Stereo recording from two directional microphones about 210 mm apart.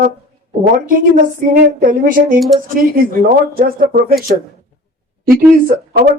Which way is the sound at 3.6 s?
40° right (ahead or behind).